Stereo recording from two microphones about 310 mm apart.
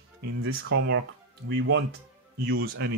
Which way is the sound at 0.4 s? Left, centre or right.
Right.